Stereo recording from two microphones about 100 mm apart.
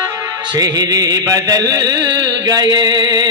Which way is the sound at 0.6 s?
40° right (ahead or behind).